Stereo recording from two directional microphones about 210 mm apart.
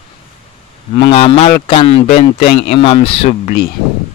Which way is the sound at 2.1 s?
35° left (ahead or behind).